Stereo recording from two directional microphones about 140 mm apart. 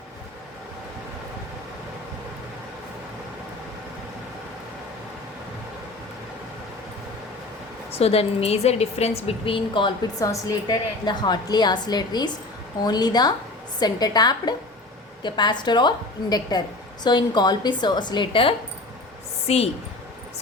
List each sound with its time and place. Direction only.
7.9 s a woman's voice: 45° left (ahead or behind)
19.5 s a woman's voice: 45° left (ahead or behind)